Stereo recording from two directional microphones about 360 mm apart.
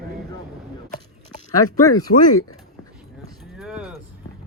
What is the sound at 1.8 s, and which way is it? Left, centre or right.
Speech, centre.